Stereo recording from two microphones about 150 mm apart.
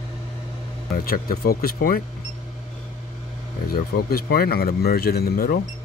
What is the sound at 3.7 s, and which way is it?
Speech, 90° left.